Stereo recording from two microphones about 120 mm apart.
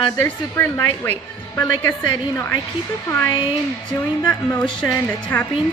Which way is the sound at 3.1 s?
15° left (ahead or behind).